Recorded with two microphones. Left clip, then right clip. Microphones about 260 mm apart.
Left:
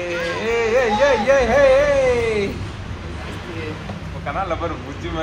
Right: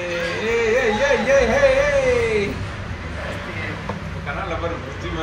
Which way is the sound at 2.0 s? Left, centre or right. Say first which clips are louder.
Even; centre.